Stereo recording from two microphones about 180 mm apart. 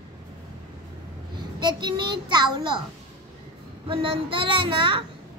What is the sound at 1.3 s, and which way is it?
A woman's voice, 25° right (ahead or behind).